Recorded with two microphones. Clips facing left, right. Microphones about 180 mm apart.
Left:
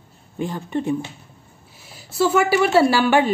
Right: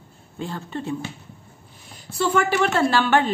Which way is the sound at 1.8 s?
5° left (ahead or behind).